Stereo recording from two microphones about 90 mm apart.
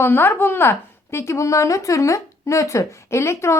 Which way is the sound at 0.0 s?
25° left (ahead or behind).